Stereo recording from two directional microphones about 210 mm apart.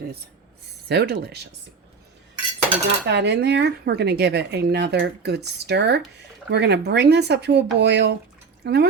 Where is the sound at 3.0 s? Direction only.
55° right (ahead or behind).